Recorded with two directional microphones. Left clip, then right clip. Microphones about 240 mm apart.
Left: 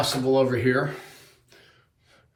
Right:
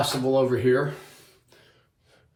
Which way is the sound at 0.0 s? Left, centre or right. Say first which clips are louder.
Left 1 dB; centre.